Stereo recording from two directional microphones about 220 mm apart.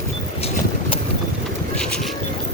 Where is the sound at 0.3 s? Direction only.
25° left (ahead or behind).